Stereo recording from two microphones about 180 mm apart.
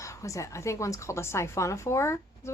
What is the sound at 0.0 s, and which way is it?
Speech, 15° left (ahead or behind).